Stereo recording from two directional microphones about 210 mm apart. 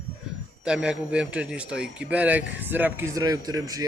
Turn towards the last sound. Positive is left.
turn(degrees=-15)  # may be behind; listen again after turning